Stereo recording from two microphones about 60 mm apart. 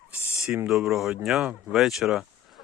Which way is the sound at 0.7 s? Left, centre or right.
Centre.